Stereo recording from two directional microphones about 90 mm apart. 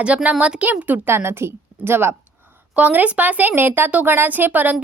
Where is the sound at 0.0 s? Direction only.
15° right (ahead or behind).